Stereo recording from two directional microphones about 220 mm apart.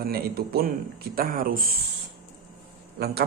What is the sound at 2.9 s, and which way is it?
Speech, 45° right (ahead or behind).